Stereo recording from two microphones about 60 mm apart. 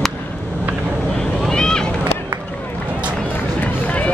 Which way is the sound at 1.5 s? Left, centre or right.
Centre.